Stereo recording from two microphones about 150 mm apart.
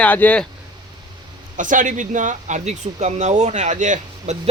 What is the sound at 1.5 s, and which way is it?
Speech, 60° right (ahead or behind).